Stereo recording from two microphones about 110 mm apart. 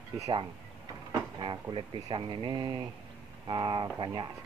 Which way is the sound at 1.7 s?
50° right (ahead or behind).